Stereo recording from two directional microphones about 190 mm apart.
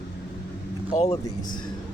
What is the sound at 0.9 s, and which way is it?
Speech, 35° left (ahead or behind).